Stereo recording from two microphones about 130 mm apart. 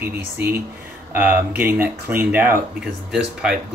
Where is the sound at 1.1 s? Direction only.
15° right (ahead or behind).